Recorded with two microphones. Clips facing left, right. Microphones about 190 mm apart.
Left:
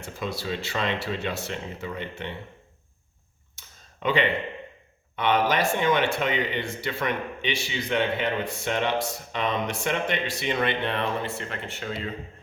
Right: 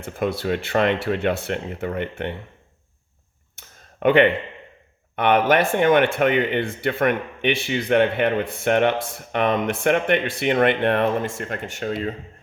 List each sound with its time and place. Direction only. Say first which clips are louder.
0.0 s speech: right 8 dB; 55° right (ahead or behind)
4.0 s speech: right 8 dB; 55° right (ahead or behind)